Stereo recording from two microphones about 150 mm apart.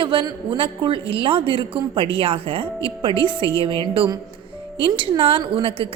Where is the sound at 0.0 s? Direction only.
35° right (ahead or behind).